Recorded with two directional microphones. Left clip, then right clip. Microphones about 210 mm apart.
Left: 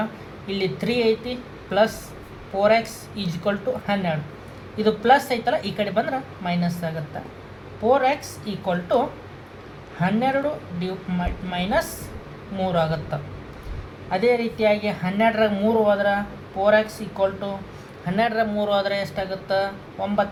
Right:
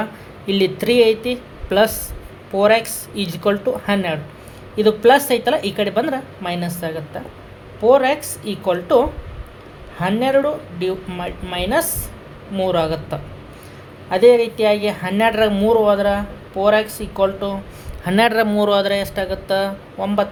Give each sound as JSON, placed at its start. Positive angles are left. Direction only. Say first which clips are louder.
{"t": 0.4, "sound": "a man's voice", "louder": "right 8 dB", "side_deg": -55}
{"t": 10.0, "sound": "a man's voice", "louder": "right 5 dB", "side_deg": -50}